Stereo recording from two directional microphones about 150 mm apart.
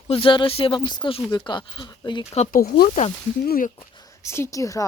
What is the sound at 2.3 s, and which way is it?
Speech, 50° left (ahead or behind).